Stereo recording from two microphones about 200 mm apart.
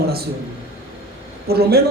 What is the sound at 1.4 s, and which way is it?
Speech, 50° right (ahead or behind).